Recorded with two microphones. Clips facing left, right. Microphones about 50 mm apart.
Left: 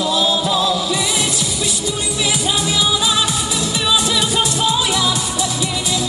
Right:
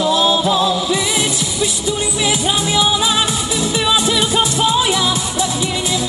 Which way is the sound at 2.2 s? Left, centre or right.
Right.